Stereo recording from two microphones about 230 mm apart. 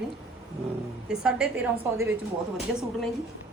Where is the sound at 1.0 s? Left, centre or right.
Centre.